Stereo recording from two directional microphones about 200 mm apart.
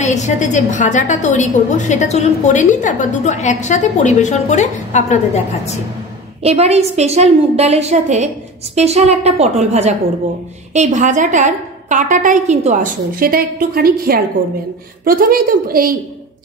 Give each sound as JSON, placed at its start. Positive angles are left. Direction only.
{"t": 0.0, "sound": "a woman's voice", "side_deg": 35}
{"t": 6.4, "sound": "a woman's voice", "side_deg": -30}